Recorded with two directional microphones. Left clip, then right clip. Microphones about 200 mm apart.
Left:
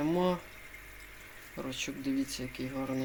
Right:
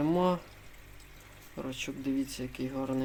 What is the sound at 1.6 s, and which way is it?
Speech, 15° right (ahead or behind).